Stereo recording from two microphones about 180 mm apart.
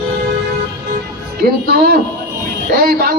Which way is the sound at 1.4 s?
55° right (ahead or behind).